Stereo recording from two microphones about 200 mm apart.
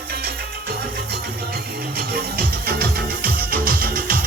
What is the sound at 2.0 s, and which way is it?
Music, 50° right (ahead or behind).